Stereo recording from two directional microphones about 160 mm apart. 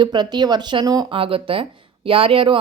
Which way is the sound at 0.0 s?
25° right (ahead or behind).